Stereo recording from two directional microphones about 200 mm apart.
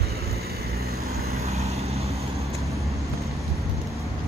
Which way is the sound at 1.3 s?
30° right (ahead or behind).